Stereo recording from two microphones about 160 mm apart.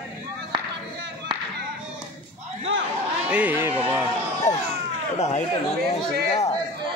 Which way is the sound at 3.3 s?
10° right (ahead or behind).